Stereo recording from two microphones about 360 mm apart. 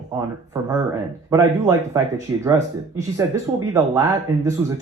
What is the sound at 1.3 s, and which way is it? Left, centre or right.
Speech, centre.